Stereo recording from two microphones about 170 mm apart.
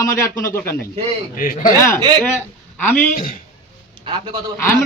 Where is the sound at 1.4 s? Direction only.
55° left (ahead or behind).